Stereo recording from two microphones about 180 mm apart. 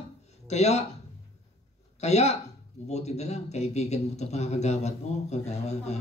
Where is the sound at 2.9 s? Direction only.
40° left (ahead or behind).